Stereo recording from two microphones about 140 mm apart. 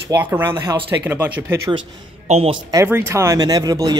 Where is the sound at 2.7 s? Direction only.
20° right (ahead or behind).